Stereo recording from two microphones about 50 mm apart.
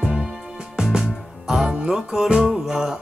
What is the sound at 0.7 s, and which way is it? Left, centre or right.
Music, centre.